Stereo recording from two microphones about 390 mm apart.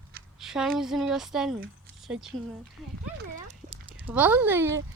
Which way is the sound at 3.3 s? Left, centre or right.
Centre.